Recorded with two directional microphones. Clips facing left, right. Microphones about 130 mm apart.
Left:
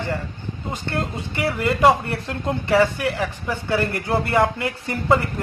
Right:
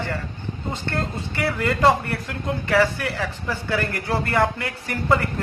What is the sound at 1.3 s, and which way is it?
Speech, 20° left (ahead or behind).